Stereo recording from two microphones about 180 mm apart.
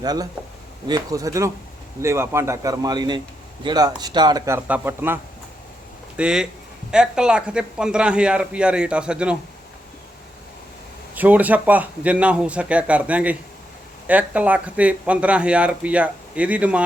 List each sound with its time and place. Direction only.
0.0 s a man's voice: 20° right (ahead or behind); by 9.4 s 5° right (ahead or behind)
11.1 s speech: 10° right (ahead or behind)